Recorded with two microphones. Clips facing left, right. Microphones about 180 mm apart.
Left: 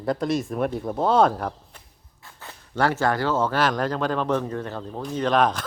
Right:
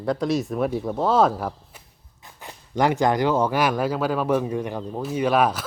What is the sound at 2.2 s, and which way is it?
Speech, 15° right (ahead or behind).